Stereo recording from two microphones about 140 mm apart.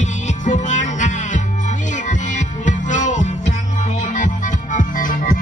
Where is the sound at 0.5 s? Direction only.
60° left (ahead or behind).